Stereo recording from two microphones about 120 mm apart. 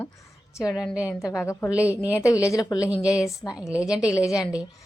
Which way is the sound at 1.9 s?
10° right (ahead or behind).